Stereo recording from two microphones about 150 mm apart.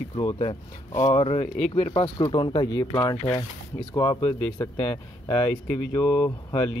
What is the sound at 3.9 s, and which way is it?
Speech, 35° left (ahead or behind).